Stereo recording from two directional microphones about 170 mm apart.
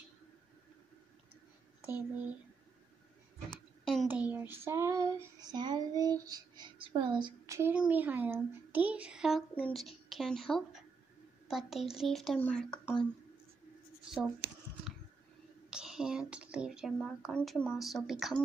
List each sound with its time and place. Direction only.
3.5 s a sound: centre (ahead or behind)
4.1 s female singing: 10° right (ahead or behind)
7.7 s speech: 10° right (ahead or behind)
14.1 s shuffling cards: centre (ahead or behind)
15.7 s speech: 5° right (ahead or behind)